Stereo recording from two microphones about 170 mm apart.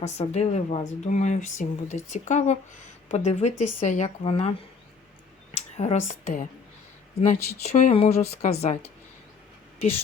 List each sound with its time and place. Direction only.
0.0 s a woman's voice: 40° left (ahead or behind)
5.5 s a woman's voice: 40° left (ahead or behind)